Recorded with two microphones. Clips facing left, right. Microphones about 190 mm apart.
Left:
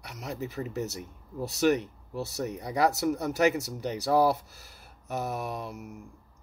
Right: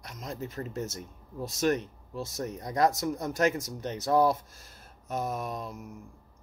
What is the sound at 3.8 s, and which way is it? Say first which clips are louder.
Speech: even; 10° left (ahead or behind).